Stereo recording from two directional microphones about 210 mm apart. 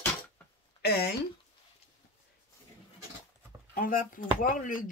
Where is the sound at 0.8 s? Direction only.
50° left (ahead or behind).